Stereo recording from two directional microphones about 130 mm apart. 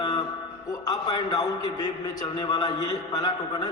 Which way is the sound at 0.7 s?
25° left (ahead or behind).